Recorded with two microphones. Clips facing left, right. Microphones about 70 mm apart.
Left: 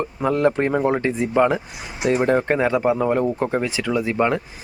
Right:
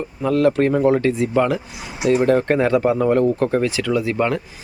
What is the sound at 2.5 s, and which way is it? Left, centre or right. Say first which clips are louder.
Speech: right 2 dB; centre.